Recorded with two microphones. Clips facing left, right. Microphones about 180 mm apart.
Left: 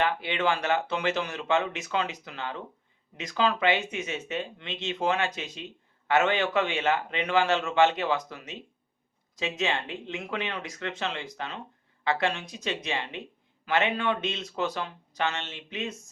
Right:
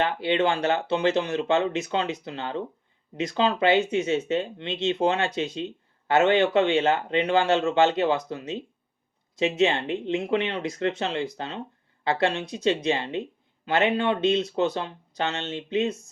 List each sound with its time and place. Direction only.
0.0 s speech: 30° right (ahead or behind)